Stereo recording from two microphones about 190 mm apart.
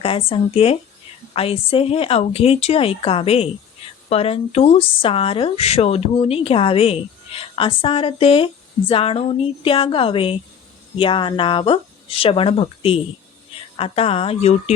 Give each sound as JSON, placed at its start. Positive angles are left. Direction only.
{"t": 0.0, "sound": "a woman's voice", "side_deg": 30}